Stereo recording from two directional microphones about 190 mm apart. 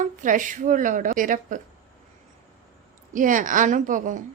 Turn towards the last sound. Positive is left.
turn(degrees=-45)  # may be behind; listen again after turning